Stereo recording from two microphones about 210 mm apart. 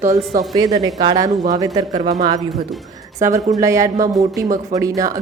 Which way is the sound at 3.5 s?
15° right (ahead or behind).